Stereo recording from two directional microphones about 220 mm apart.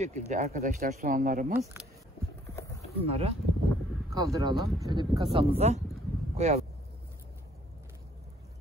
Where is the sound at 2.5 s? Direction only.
15° left (ahead or behind).